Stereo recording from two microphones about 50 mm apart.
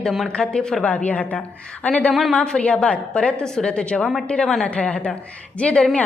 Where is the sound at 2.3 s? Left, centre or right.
Centre.